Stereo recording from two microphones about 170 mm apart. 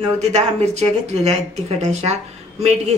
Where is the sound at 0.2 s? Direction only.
40° right (ahead or behind).